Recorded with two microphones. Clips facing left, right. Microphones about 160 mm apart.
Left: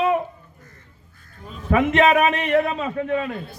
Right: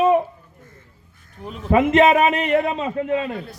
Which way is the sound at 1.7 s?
30° right (ahead or behind).